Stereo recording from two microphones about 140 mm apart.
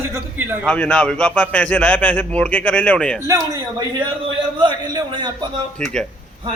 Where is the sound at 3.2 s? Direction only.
25° right (ahead or behind).